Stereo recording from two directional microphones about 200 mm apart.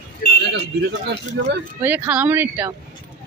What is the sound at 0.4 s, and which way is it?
Speech, 55° right (ahead or behind).